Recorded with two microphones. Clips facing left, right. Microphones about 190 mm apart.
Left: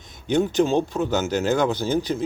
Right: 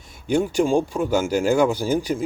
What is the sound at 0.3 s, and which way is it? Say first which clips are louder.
Speech: even; 10° right (ahead or behind).